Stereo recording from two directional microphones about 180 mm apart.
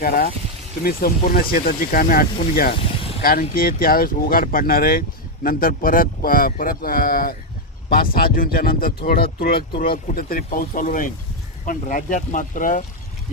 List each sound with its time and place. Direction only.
0.0 s speech: 55° left (ahead or behind)